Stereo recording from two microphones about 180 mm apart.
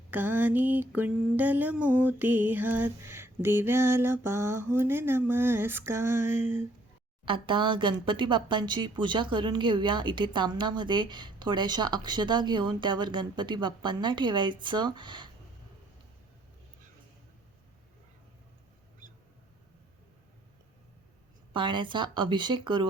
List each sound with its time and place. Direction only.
0.1 s mantra: 10° right (ahead or behind)
7.3 s speech: 25° right (ahead or behind)
21.5 s speech: 25° right (ahead or behind)